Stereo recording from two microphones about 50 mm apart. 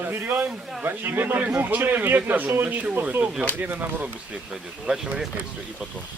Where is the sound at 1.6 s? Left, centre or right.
Right.